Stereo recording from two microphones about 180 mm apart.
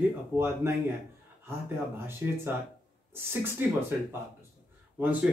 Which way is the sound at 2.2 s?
10° right (ahead or behind).